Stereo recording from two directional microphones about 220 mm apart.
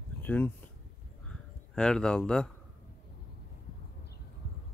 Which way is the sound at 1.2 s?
5° left (ahead or behind).